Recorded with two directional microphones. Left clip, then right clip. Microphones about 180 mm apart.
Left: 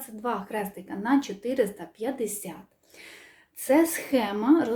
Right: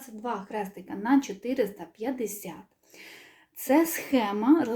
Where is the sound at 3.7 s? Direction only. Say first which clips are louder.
Left 2 dB; 10° right (ahead or behind).